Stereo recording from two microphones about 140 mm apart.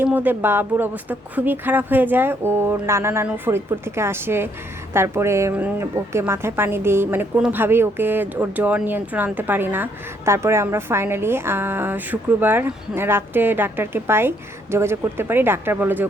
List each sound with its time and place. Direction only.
0.0 s speech: 15° right (ahead or behind)